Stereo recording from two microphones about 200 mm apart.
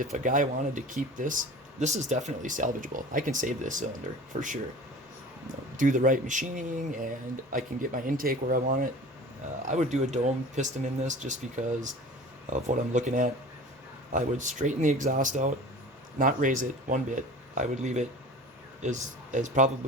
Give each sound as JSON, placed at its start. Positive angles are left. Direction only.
{"t": 0.0, "sound": "speech", "side_deg": -40}
{"t": 5.7, "sound": "speech", "side_deg": -40}